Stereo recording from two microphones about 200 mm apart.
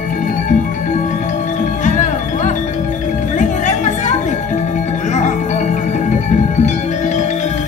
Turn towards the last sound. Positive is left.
turn(degrees=35)  # may be behind; listen again after turning